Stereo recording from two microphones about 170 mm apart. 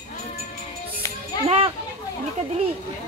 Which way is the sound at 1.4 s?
35° right (ahead or behind).